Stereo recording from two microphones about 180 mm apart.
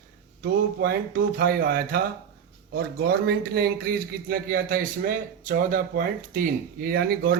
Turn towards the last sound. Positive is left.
turn(degrees=-60)  # may be behind; listen again after turning